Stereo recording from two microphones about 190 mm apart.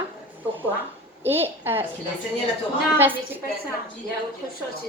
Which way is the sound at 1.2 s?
10° right (ahead or behind).